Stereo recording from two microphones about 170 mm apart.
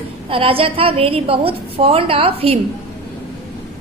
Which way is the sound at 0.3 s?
30° right (ahead or behind).